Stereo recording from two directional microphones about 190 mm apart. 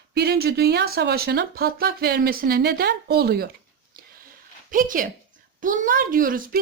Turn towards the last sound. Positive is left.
turn(degrees=-45)  # may be behind; listen again after turning